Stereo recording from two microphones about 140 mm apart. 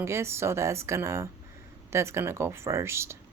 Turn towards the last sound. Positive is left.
turn(degrees=-20)  # may be behind; listen again after turning